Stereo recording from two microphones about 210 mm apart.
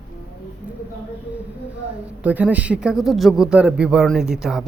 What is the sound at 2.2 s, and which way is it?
Speech, 5° right (ahead or behind).